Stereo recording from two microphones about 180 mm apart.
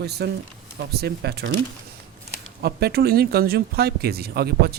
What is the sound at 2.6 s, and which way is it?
Speech, 60° right (ahead or behind).